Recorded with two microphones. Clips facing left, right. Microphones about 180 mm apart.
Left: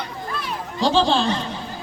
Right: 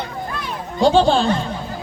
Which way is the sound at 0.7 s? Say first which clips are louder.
Right 5 dB; 50° right (ahead or behind).